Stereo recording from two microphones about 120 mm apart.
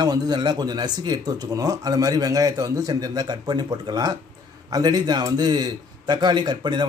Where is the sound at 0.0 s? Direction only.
35° right (ahead or behind).